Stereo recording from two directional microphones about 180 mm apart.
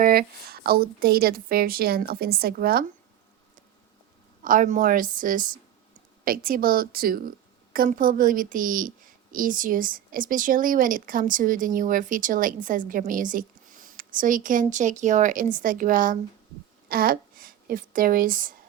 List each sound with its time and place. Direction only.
0.0 s a woman's voice: 55° right (ahead or behind)
4.4 s a woman's voice: 45° right (ahead or behind)